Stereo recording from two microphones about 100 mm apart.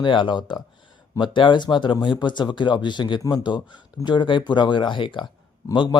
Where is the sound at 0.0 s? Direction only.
55° left (ahead or behind).